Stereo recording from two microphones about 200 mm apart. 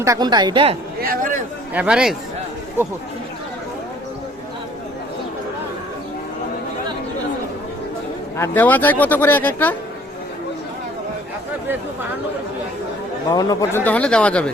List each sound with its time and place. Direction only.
0.0 s a woman's voice: 20° right (ahead or behind)
1.0 s speech: 45° right (ahead or behind)
1.7 s speech: 5° right (ahead or behind)
8.4 s a man's voice: 10° left (ahead or behind)
13.3 s a man's voice: 15° left (ahead or behind)